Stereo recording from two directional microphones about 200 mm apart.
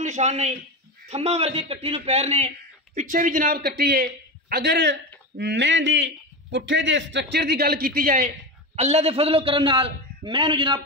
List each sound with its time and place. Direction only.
0.0 s a man's voice: 35° right (ahead or behind)
8.7 s a man's voice: 30° right (ahead or behind)